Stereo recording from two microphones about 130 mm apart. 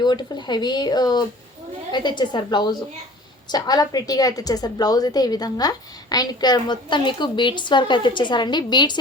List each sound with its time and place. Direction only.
0.0 s a woman's voice: 35° left (ahead or behind)